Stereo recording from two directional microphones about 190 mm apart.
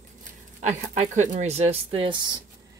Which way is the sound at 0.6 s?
35° right (ahead or behind).